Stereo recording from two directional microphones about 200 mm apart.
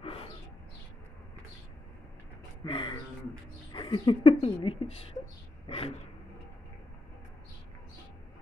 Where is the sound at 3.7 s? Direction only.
25° left (ahead or behind).